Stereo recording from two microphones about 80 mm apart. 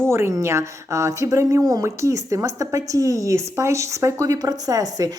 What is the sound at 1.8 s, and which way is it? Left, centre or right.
A woman's voice, right.